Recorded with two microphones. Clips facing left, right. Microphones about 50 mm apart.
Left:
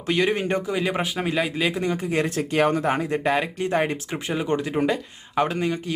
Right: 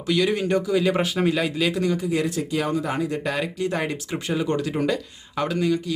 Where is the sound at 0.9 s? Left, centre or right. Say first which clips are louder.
Right 4 dB; centre.